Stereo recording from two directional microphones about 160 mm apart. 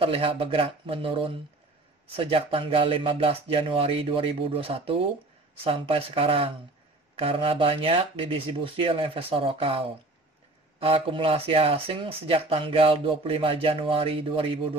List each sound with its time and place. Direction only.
0.0 s speech: 35° right (ahead or behind)